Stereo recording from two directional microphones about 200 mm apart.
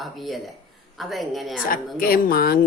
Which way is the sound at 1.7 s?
45° left (ahead or behind).